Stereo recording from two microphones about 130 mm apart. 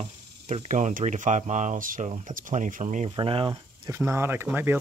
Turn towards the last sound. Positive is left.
turn(degrees=-20)  # may be behind; listen again after turning